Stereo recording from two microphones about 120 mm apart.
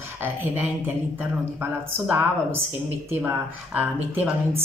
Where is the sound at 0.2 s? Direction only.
15° right (ahead or behind).